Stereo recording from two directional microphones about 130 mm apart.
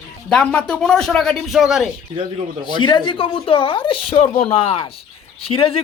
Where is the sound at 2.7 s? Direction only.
35° left (ahead or behind).